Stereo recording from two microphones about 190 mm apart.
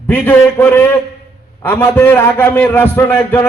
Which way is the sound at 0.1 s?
10° left (ahead or behind).